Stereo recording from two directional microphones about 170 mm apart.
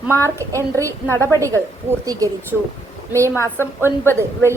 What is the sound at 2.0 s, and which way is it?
A woman's voice, 20° right (ahead or behind).